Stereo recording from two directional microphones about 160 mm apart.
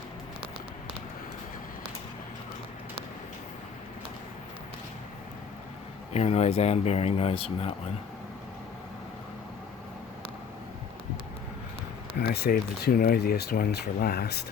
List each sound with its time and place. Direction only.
6.1 s speech: 40° left (ahead or behind)
12.2 s speech: 80° left